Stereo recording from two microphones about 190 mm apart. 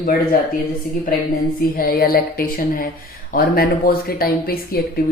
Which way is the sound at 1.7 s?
50° left (ahead or behind).